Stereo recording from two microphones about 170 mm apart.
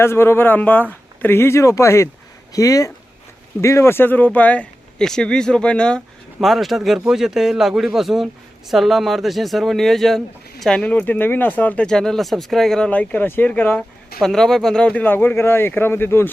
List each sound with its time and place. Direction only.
0.0 s speech: 15° left (ahead or behind)